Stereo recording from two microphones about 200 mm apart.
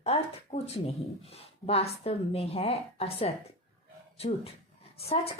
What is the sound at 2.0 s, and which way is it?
A woman's voice, 30° left (ahead or behind).